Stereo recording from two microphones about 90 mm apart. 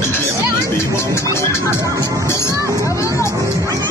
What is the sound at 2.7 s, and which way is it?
Vehicle, 35° left (ahead or behind).